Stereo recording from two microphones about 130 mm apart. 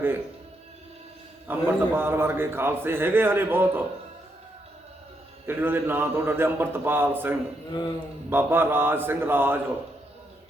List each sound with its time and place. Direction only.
1.5 s a man's voice: 15° right (ahead or behind)
5.5 s a man's voice: 15° right (ahead or behind)
7.7 s speech: 35° left (ahead or behind)
8.3 s a man's voice: 15° right (ahead or behind)